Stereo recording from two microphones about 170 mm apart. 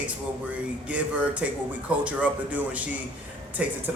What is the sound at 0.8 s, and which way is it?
Speech, 10° right (ahead or behind).